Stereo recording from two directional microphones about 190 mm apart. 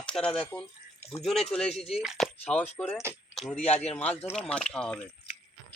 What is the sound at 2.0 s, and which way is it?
Speech, centre (ahead or behind).